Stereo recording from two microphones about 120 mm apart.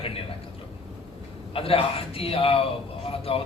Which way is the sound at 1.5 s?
50° left (ahead or behind).